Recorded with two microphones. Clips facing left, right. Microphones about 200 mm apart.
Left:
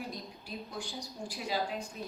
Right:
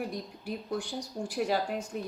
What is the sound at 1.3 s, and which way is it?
Speech, 60° right (ahead or behind).